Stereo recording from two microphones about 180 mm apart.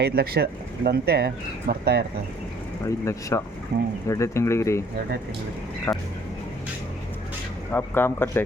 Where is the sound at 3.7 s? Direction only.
65° right (ahead or behind).